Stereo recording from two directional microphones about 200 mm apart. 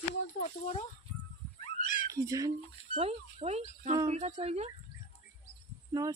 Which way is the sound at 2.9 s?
30° right (ahead or behind).